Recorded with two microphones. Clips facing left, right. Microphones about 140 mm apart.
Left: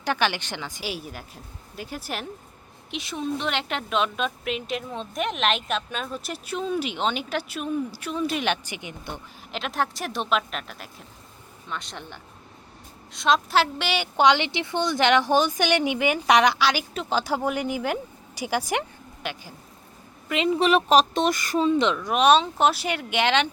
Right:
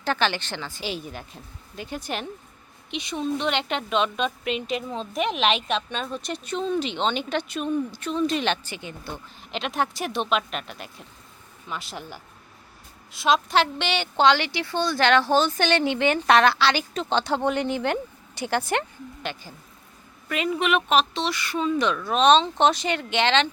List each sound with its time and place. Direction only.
0.0 s a woman's voice: 10° left (ahead or behind)
9.5 s a woman's voice: centre (ahead or behind)
20.2 s a woman's voice: 20° left (ahead or behind); by 21.7 s 40° left (ahead or behind)
21.7 s speech: 25° left (ahead or behind)
21.9 s a woman's voice: 10° left (ahead or behind)